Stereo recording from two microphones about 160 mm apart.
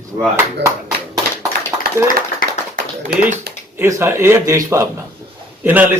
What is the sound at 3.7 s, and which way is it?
Speech, 15° right (ahead or behind).